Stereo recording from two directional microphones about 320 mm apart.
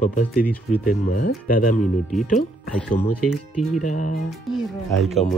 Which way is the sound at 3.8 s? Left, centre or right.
Left.